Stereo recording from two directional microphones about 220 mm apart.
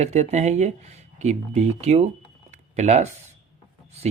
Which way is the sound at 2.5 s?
30° right (ahead or behind).